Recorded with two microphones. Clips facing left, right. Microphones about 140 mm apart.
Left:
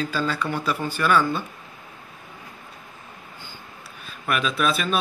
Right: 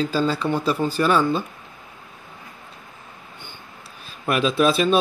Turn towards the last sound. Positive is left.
turn(degrees=-30)  # may be behind; listen again after turning